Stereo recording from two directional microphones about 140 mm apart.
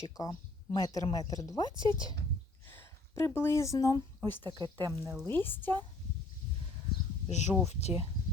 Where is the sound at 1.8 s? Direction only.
35° right (ahead or behind).